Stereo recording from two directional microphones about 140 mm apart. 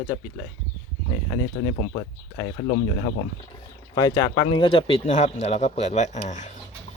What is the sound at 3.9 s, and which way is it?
Speech, 25° left (ahead or behind).